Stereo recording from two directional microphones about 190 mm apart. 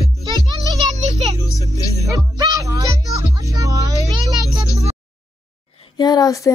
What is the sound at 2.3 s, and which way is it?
Music, 20° right (ahead or behind).